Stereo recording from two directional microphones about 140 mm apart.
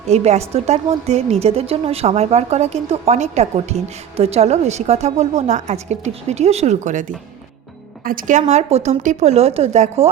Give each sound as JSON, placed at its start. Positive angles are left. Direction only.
{"t": 0.1, "sound": "a woman's voice", "side_deg": -50}
{"t": 8.0, "sound": "a woman's voice", "side_deg": -75}